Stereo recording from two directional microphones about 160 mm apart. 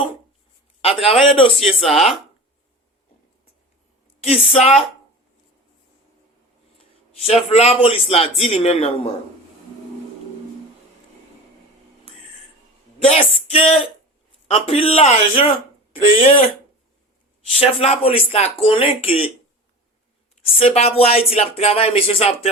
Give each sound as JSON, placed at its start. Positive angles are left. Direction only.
{"t": 0.8, "sound": "speech", "side_deg": 40}
{"t": 1.8, "sound": "speech", "side_deg": 0}
{"t": 4.2, "sound": "a woman's voice", "side_deg": 40}
{"t": 7.3, "sound": "speech", "side_deg": 40}
{"t": 13.0, "sound": "a woman's voice", "side_deg": 40}
{"t": 17.6, "sound": "speech", "side_deg": 40}
{"t": 20.6, "sound": "speech", "side_deg": 40}